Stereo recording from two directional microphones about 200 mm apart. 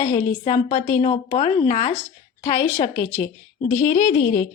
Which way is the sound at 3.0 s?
10° left (ahead or behind).